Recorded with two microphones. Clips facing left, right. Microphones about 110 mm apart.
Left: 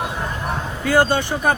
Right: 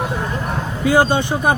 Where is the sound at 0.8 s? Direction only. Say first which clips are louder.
Right 2 dB; 15° right (ahead or behind).